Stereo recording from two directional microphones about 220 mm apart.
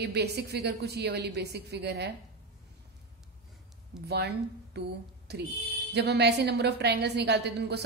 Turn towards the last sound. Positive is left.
turn(degrees=-50)  # may be behind; listen again after turning